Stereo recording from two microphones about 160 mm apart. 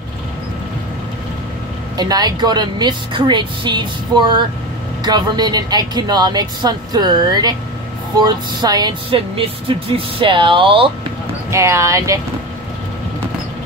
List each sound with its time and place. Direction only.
2.0 s a woman's voice: 25° right (ahead or behind)
11.5 s a woman's voice: 15° right (ahead or behind)